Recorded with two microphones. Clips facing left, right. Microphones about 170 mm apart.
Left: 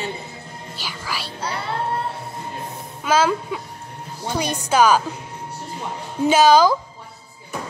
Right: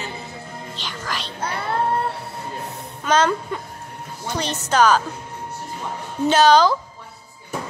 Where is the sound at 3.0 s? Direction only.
5° left (ahead or behind).